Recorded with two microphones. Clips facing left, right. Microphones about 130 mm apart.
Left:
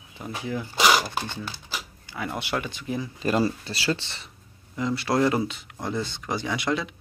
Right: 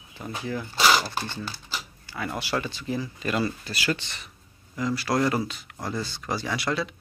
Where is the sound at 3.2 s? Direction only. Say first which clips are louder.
Left 7 dB; 35° left (ahead or behind); by 6.9 s 15° left (ahead or behind).